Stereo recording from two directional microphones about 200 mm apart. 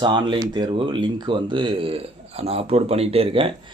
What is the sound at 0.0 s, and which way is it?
A man's voice, 25° right (ahead or behind).